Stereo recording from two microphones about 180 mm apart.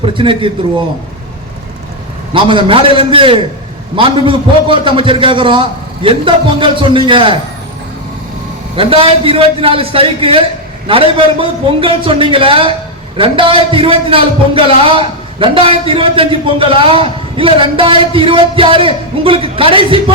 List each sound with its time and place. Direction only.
0.0 s a man's voice: 30° right (ahead or behind)
2.3 s a man's voice: 30° right (ahead or behind)
8.7 s a man's voice: 30° right (ahead or behind)